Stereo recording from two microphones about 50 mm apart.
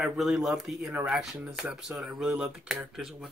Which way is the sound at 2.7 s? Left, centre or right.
Centre.